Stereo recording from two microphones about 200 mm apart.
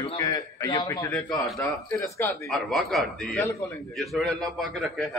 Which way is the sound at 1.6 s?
15° left (ahead or behind).